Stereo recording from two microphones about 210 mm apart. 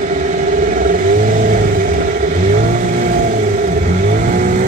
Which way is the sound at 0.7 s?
40° right (ahead or behind).